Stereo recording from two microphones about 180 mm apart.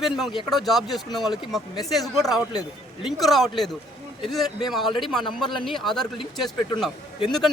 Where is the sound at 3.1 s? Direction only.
Centre (ahead or behind).